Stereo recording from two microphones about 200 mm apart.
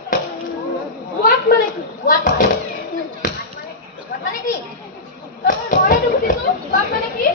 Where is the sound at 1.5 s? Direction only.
45° left (ahead or behind).